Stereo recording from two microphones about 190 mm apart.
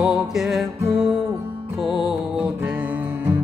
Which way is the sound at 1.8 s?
Centre (ahead or behind).